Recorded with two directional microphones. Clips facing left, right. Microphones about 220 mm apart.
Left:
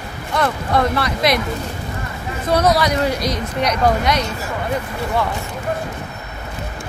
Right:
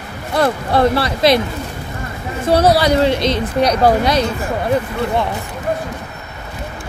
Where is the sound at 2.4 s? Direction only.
30° right (ahead or behind).